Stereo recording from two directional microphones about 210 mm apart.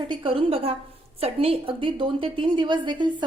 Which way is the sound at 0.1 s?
25° right (ahead or behind).